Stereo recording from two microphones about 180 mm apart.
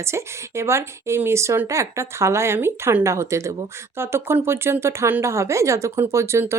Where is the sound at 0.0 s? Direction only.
15° right (ahead or behind).